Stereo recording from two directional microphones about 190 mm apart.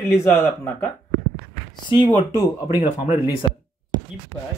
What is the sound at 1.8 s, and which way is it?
Speech, 25° left (ahead or behind).